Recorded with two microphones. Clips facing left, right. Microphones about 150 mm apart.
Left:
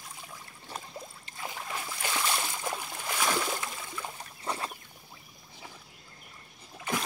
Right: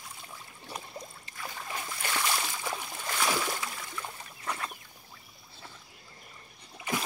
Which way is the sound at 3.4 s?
5° left (ahead or behind).